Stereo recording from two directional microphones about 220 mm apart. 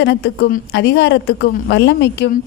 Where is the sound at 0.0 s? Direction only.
50° left (ahead or behind).